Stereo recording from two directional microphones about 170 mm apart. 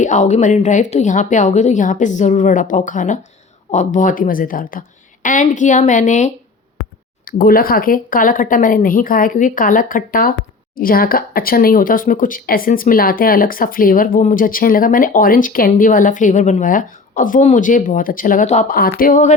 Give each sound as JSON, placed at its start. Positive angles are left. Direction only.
{"t": 0.0, "sound": "a woman's voice", "side_deg": 45}
{"t": 7.3, "sound": "speech", "side_deg": 60}
{"t": 18.8, "sound": "speech", "side_deg": 55}